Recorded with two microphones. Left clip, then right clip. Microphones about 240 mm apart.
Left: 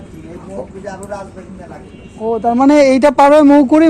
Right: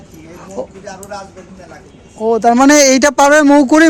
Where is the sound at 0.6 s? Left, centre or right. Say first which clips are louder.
Right 5 dB; right.